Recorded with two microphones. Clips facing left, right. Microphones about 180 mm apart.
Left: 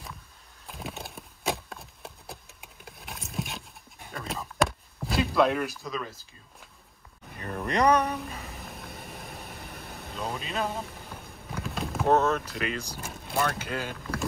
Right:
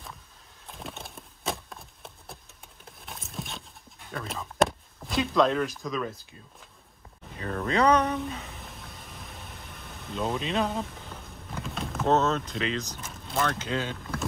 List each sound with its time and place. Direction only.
0.7 s horse: centre (ahead or behind)
4.1 s chop: centre (ahead or behind)
7.4 s speech: 15° left (ahead or behind)
8.0 s a sound: centre (ahead or behind)
8.8 s vehicle: 60° left (ahead or behind)
10.0 s speech: centre (ahead or behind)
11.5 s a sound: centre (ahead or behind)
12.1 s speech: 10° left (ahead or behind)